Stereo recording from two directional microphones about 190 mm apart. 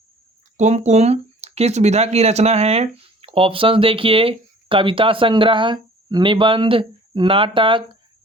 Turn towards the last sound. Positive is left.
turn(degrees=-25)  # may be behind; listen again after turning